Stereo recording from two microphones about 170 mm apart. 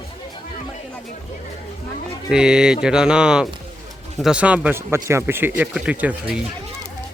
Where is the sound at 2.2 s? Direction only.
5° right (ahead or behind).